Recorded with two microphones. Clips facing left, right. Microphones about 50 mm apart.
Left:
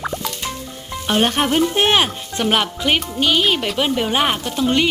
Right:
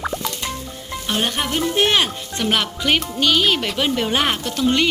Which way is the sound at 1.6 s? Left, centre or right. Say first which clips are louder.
Even; left.